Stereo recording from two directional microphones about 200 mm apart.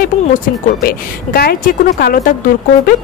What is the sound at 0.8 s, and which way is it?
A woman's voice, 50° left (ahead or behind).